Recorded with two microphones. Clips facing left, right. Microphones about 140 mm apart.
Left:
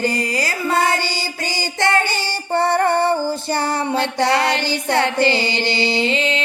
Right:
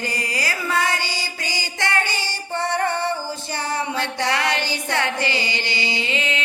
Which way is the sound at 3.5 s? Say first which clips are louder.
Left 4 dB; 30° left (ahead or behind).